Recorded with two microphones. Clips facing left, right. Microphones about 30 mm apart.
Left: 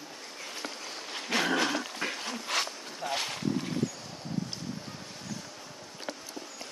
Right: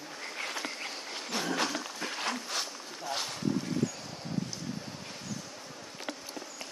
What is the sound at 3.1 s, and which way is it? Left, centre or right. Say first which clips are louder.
Boat: left 2 dB; left.